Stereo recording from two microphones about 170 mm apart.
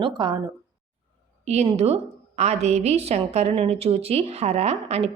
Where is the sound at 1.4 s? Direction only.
40° right (ahead or behind).